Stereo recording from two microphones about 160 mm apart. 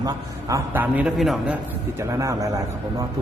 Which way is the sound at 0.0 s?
20° right (ahead or behind).